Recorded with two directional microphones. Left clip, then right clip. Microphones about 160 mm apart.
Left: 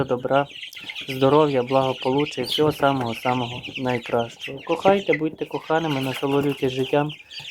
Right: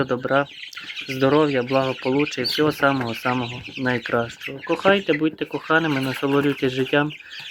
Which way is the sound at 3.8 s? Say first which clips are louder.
Right 2 dB; centre (ahead or behind).